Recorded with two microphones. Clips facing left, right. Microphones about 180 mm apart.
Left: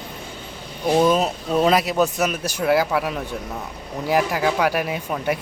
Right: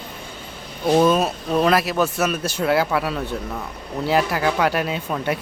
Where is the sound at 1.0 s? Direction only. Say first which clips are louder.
Left 1 dB; 15° left (ahead or behind).